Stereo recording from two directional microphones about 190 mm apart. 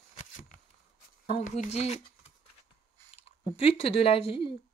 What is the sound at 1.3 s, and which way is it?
Speech, 40° left (ahead or behind).